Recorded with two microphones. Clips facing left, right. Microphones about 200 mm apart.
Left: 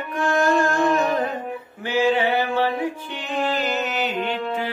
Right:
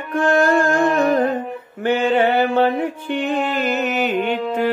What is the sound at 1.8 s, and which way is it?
Mantra, 55° right (ahead or behind).